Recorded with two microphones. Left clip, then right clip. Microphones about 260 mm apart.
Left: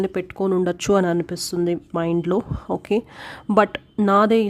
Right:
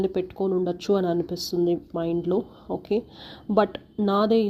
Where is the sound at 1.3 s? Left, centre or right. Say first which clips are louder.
Left 2 dB; left.